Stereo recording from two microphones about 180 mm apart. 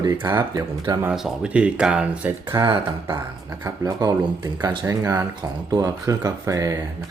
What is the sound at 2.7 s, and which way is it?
Speech, 30° right (ahead or behind).